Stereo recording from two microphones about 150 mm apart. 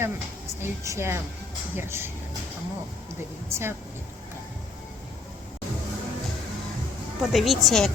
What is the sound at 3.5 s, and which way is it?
Speech, 15° right (ahead or behind).